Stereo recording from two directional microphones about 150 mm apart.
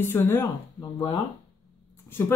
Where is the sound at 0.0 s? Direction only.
15° left (ahead or behind).